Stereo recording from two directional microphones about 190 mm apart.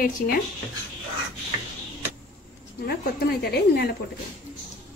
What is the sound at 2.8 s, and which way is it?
Speech, 55° left (ahead or behind).